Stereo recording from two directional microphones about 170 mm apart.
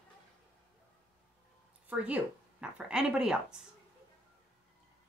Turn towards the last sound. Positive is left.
turn(degrees=-5)  # may be behind; listen again after turning